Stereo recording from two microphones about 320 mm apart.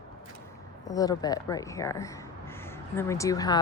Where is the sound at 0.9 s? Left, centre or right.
Centre.